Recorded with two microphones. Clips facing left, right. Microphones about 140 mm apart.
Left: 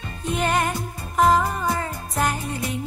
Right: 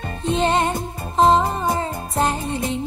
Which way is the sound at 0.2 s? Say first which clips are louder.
Right 4 dB; 25° right (ahead or behind).